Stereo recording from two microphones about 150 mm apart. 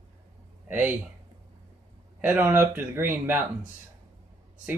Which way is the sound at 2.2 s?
15° right (ahead or behind).